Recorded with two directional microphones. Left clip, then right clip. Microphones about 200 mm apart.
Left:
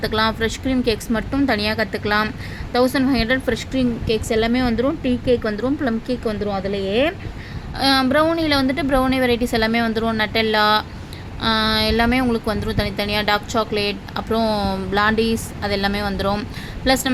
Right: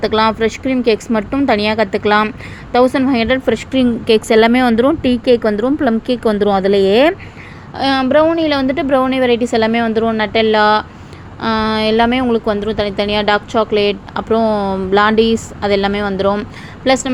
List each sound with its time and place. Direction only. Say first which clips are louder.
0.0 s a woman's voice: right 6 dB; 10° right (ahead or behind)
7.8 s a woman's voice: right 4 dB; 10° right (ahead or behind)